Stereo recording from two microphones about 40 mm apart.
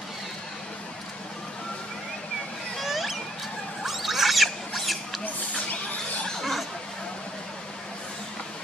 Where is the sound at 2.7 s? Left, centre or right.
Centre.